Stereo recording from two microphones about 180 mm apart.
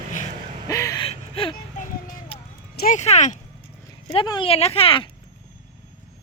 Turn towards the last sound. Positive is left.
turn(degrees=30)  # may be behind; listen again after turning